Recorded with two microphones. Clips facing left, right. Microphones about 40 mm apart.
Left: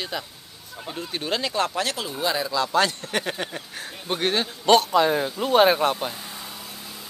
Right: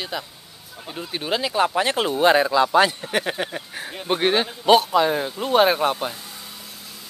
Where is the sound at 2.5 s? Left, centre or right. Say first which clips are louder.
Right 5 dB; right; by 6.2 s centre.